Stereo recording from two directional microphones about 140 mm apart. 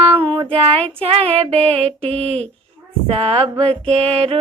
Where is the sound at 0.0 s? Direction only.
40° right (ahead or behind).